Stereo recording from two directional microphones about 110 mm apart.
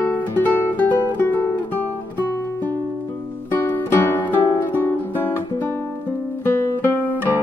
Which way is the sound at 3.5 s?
15° left (ahead or behind).